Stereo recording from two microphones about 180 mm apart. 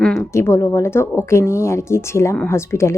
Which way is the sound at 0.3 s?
15° left (ahead or behind).